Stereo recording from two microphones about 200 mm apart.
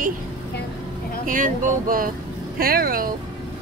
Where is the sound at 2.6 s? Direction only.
45° right (ahead or behind).